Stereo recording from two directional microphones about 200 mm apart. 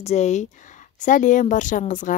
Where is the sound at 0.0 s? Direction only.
35° left (ahead or behind).